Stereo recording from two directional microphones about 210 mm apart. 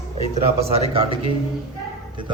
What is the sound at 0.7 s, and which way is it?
Speech, 25° right (ahead or behind).